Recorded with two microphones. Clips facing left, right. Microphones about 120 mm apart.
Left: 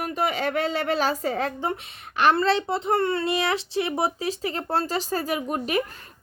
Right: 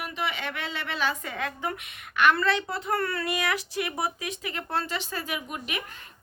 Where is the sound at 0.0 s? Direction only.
40° left (ahead or behind).